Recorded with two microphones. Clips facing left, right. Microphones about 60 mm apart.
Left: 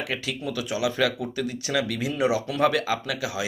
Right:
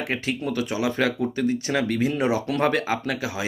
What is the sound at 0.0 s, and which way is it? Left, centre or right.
Speech, right.